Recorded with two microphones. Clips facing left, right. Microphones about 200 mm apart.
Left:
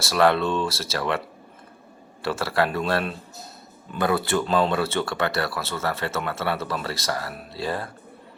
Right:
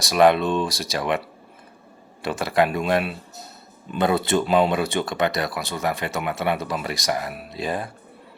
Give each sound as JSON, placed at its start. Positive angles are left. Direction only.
{"t": 0.0, "sound": "speech", "side_deg": -15}
{"t": 2.2, "sound": "speech", "side_deg": -15}